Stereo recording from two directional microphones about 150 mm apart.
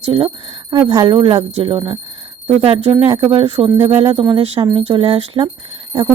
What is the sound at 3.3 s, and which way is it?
Speech, 35° right (ahead or behind).